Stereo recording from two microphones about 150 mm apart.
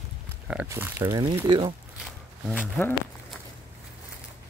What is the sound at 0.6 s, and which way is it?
Speech, 15° right (ahead or behind).